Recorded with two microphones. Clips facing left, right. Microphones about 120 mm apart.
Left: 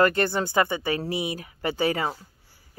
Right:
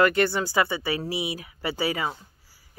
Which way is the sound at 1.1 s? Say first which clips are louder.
Left 1 dB; 15° right (ahead or behind).